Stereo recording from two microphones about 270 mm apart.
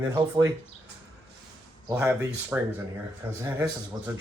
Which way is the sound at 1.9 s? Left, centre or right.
Centre.